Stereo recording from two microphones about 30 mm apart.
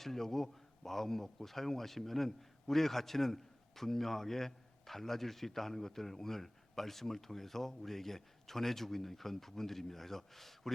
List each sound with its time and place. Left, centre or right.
0.0 s a man's voice: centre